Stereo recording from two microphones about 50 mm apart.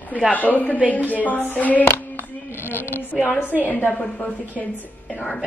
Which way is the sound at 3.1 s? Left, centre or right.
Right.